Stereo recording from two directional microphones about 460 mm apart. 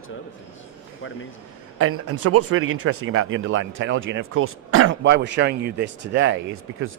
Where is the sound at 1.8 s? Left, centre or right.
Right.